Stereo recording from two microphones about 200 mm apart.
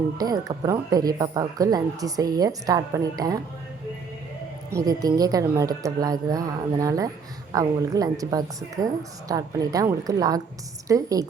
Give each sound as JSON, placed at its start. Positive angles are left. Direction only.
{"t": 0.2, "sound": "speech", "side_deg": -15}
{"t": 4.7, "sound": "speech", "side_deg": -15}